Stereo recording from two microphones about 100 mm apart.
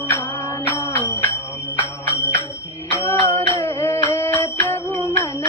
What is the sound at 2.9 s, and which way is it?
Music, 20° left (ahead or behind).